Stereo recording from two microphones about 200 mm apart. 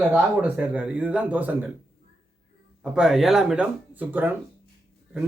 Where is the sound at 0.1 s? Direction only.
5° right (ahead or behind).